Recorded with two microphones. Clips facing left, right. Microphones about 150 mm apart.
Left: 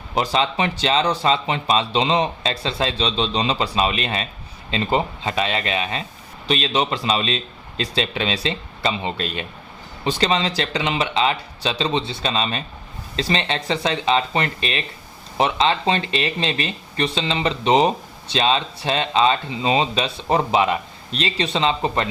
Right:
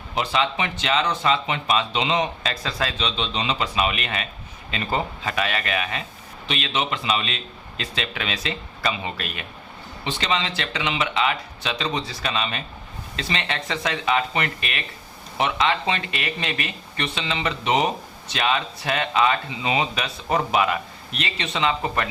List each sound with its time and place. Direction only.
0.2 s speech: 35° left (ahead or behind)